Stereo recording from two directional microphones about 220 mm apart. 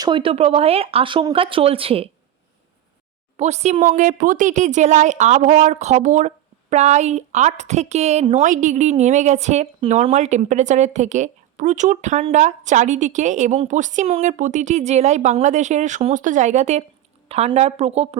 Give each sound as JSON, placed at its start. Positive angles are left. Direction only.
{"t": 0.0, "sound": "speech", "side_deg": -20}
{"t": 3.3, "sound": "speech", "side_deg": -30}